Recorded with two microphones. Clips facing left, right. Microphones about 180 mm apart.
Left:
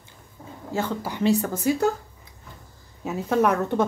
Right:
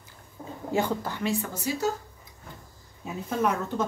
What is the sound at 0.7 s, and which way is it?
Speech, 20° right (ahead or behind).